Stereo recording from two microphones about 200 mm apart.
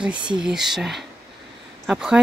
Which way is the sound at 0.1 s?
20° right (ahead or behind).